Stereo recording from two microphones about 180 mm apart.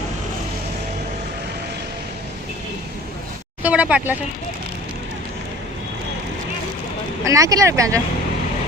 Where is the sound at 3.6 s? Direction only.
5° right (ahead or behind).